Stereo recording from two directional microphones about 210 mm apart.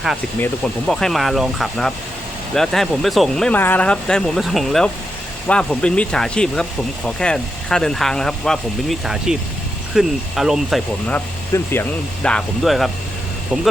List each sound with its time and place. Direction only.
0.3 s speech: 5° left (ahead or behind)
11.5 s speech: 10° left (ahead or behind)